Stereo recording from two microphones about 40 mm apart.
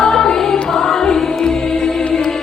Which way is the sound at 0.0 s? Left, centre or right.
Centre.